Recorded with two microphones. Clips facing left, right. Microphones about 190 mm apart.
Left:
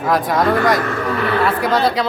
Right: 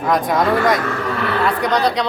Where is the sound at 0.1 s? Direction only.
Centre (ahead or behind).